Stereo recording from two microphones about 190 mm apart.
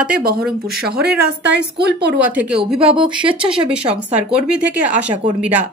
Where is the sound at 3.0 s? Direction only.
25° right (ahead or behind).